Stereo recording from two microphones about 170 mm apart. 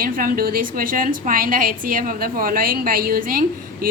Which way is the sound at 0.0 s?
55° right (ahead or behind).